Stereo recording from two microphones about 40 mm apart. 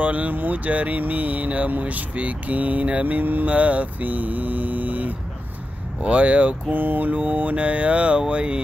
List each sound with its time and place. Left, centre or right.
0.0 s speech: right
6.0 s mantra: right
6.7 s mantra: right
8.3 s speech: right